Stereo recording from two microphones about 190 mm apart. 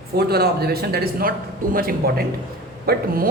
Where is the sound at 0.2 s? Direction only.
60° right (ahead or behind).